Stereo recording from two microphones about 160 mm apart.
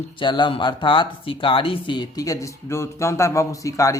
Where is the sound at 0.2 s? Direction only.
30° left (ahead or behind).